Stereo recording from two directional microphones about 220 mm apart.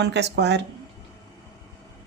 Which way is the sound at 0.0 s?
50° right (ahead or behind).